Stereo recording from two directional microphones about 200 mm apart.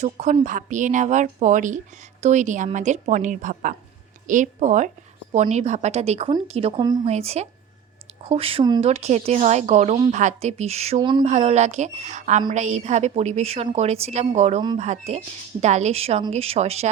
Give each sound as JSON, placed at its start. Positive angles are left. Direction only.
{"t": 0.0, "sound": "speech", "side_deg": -35}
{"t": 7.1, "sound": "speech", "side_deg": -30}